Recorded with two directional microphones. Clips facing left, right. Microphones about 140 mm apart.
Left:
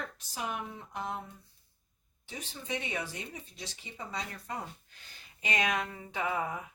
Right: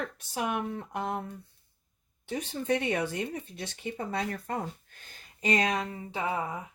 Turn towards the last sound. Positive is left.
turn(degrees=-30)  # may be behind; listen again after turning